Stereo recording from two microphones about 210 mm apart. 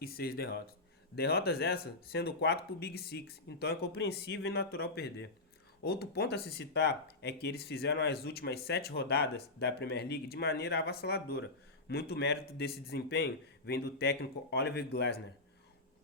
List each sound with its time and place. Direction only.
0.0 s speech: 45° left (ahead or behind)